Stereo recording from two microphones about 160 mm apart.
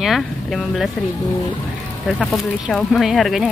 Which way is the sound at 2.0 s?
Centre (ahead or behind).